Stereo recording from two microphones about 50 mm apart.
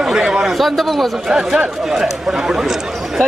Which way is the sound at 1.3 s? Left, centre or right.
Centre.